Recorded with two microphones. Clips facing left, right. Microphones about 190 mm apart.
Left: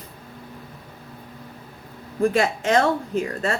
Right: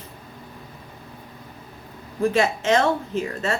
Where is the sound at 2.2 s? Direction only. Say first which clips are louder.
Even; 40° left (ahead or behind).